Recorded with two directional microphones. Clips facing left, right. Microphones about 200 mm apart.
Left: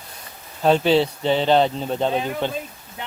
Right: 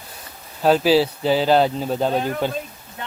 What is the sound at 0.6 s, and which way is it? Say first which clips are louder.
Speech: right 1 dB; 5° right (ahead or behind).